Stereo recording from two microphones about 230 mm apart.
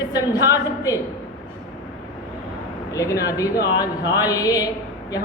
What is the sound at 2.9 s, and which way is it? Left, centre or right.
A woman's voice, centre.